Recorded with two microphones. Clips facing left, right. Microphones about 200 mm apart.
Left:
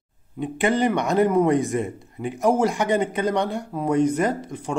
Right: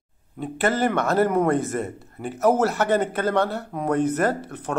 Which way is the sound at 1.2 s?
15° left (ahead or behind).